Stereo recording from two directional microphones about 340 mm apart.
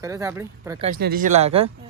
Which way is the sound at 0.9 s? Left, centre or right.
Right.